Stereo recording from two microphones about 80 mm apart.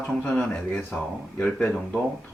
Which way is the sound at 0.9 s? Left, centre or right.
Left.